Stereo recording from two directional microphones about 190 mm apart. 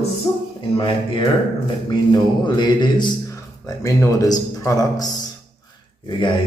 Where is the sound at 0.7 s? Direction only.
25° left (ahead or behind).